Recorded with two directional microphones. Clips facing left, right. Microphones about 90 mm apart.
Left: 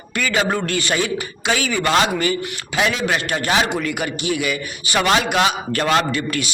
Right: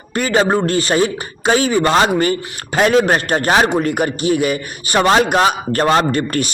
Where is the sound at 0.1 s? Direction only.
35° right (ahead or behind).